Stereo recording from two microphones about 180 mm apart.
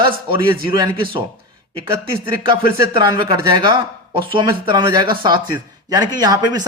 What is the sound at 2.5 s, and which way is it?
Speech, 25° right (ahead or behind).